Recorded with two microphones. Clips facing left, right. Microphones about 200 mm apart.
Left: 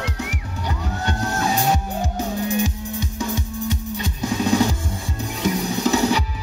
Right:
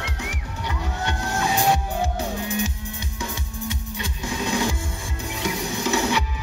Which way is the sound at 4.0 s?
40° left (ahead or behind).